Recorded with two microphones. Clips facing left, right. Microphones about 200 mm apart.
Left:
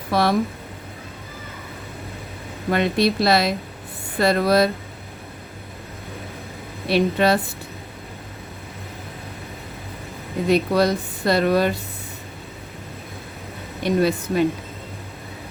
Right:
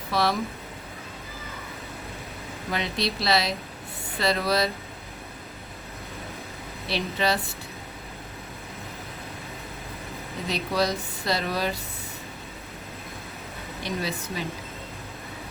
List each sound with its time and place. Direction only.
0.1 s speech: 55° left (ahead or behind)
2.6 s speech: 55° left (ahead or behind)
6.8 s speech: 55° left (ahead or behind)
10.5 s speech: 55° left (ahead or behind)
13.8 s speech: 60° left (ahead or behind)